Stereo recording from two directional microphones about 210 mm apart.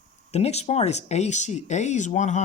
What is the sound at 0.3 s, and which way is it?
Speech, 30° left (ahead or behind).